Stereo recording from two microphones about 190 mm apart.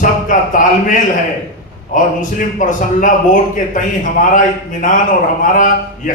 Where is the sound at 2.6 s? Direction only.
40° left (ahead or behind).